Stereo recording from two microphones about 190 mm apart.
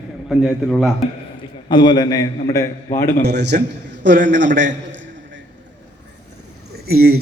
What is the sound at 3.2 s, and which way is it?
A man's voice, 65° right (ahead or behind).